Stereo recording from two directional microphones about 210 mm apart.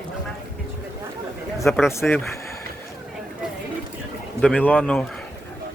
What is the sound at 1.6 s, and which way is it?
Speech, 10° left (ahead or behind).